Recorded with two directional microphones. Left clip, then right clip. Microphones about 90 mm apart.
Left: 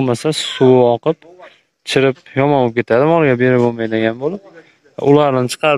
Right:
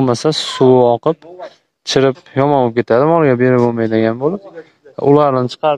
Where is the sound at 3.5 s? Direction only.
5° right (ahead or behind).